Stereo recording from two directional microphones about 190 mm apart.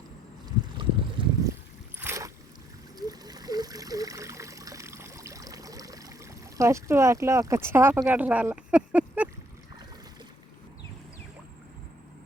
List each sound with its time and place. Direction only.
0.4 s a sound: 25° right (ahead or behind)
2.0 s boat: 15° right (ahead or behind)
3.1 s trickle: 20° right (ahead or behind)
6.6 s speech: 15° right (ahead or behind)